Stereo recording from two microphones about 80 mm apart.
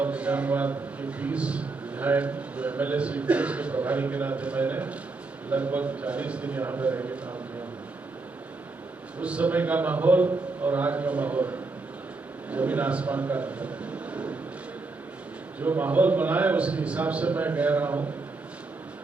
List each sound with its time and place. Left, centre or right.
0.0 s a man's voice: centre
9.2 s a man's voice: centre
15.6 s a man's voice: right